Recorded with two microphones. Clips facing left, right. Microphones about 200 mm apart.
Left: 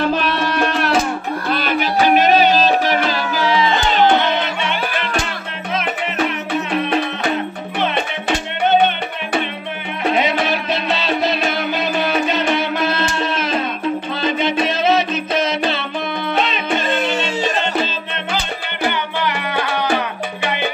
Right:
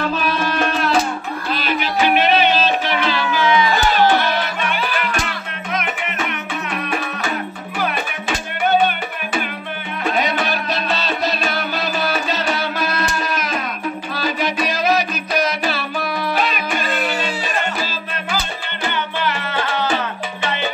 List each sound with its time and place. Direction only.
1.5 s music: 50° left (ahead or behind); by 7.0 s 30° left (ahead or behind)
10.1 s music: 25° left (ahead or behind)
20.4 s salsa music: 15° left (ahead or behind)